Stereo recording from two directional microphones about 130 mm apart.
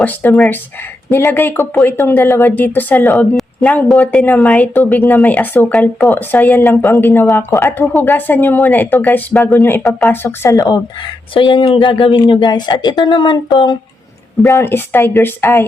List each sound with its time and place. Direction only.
0.0 s a woman's voice: 15° left (ahead or behind); by 13.7 s 35° left (ahead or behind)
14.4 s speech: 20° left (ahead or behind)